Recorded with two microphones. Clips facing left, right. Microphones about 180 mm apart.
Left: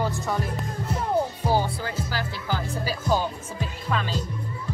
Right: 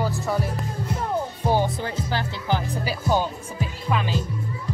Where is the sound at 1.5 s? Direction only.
25° right (ahead or behind).